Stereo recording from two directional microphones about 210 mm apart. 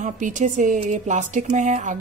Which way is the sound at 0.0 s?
35° right (ahead or behind).